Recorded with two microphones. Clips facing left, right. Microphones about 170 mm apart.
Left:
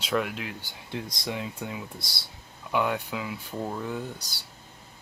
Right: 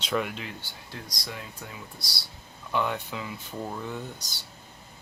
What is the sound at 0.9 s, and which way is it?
Speech, 25° left (ahead or behind).